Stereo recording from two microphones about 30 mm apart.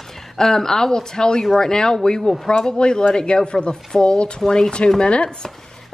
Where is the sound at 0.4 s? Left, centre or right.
Centre.